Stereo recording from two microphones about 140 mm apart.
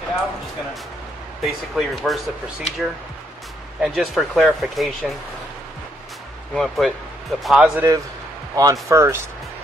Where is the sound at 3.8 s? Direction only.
Centre (ahead or behind).